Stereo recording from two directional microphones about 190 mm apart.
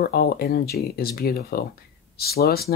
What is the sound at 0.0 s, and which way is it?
Speech, 55° left (ahead or behind).